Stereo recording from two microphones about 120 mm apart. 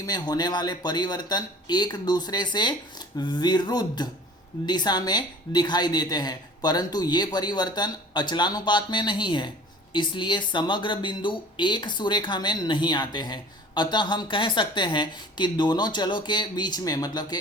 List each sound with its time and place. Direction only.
0.0 s speech: 35° left (ahead or behind)